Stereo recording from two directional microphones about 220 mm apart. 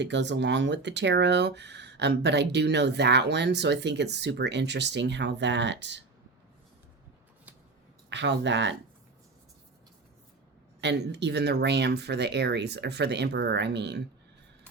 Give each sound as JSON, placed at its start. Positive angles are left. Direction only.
{"t": 0.0, "sound": "speech", "side_deg": -55}
{"t": 8.1, "sound": "speech", "side_deg": -55}
{"t": 10.8, "sound": "speech", "side_deg": -50}